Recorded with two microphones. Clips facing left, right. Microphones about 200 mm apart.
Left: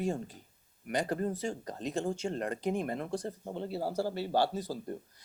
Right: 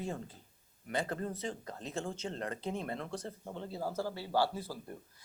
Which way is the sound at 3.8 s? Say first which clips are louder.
Left 3 dB; 40° left (ahead or behind).